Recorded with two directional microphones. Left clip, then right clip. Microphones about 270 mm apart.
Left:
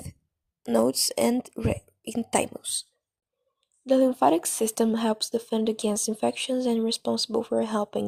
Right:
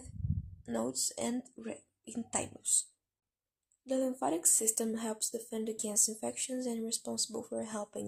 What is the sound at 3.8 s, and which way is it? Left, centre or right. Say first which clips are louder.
Speech: left 13 dB; left.